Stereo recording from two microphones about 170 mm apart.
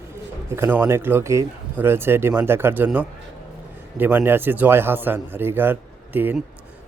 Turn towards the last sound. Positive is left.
turn(degrees=-10)  # may be behind; listen again after turning